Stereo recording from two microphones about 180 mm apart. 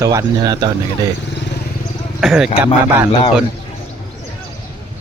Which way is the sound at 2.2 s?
Centre (ahead or behind).